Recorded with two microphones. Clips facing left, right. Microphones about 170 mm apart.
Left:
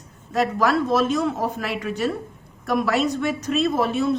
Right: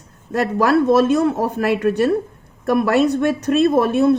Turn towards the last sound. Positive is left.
turn(degrees=-55)  # may be behind; listen again after turning